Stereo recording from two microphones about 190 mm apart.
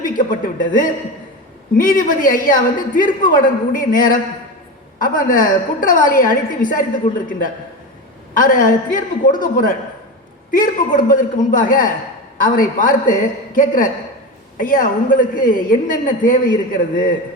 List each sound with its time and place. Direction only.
0.0 s a woman's voice: 45° left (ahead or behind)
8.3 s a woman's voice: 45° left (ahead or behind)